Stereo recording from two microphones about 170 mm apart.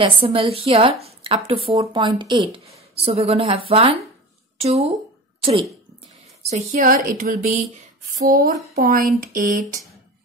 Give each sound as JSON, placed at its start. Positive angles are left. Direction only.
{"t": 0.0, "sound": "a woman's voice", "side_deg": -35}
{"t": 6.5, "sound": "speech", "side_deg": -50}
{"t": 8.3, "sound": "a sound", "side_deg": -55}